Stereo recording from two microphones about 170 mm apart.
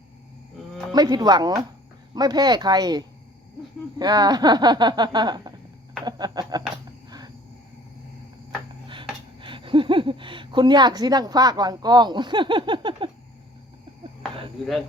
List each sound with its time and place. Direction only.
0.9 s speech: 25° right (ahead or behind)
6.1 s a sound: 25° right (ahead or behind)
8.9 s speech: 30° right (ahead or behind)